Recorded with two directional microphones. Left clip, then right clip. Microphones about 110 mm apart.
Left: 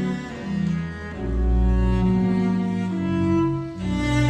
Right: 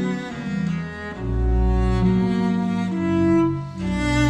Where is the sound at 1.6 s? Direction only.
35° right (ahead or behind).